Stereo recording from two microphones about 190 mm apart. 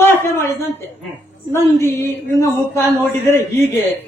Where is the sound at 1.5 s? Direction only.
15° left (ahead or behind).